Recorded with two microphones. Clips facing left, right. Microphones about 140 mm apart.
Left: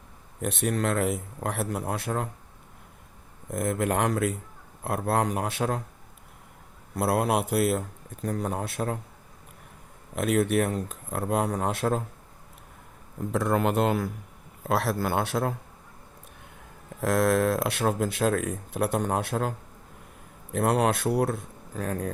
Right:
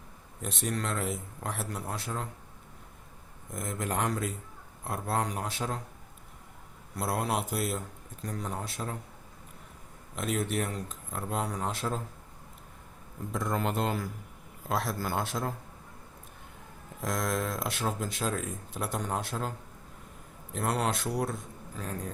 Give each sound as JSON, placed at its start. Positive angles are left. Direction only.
{"t": 0.4, "sound": "speech", "side_deg": 60}
{"t": 3.5, "sound": "speech", "side_deg": 60}
{"t": 6.9, "sound": "speech", "side_deg": 60}
{"t": 10.2, "sound": "speech", "side_deg": 60}
{"t": 13.3, "sound": "speech", "side_deg": 70}
{"t": 17.0, "sound": "speech", "side_deg": 65}